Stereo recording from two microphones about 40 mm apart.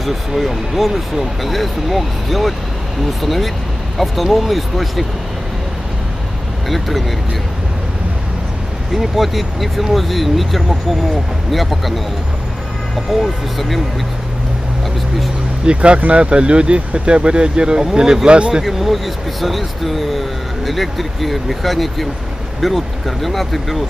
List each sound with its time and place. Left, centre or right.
0.3 s speech: centre
6.7 s speech: centre
8.9 s speech: centre
13.2 s speech: centre
15.6 s speech: right
18.6 s speech: centre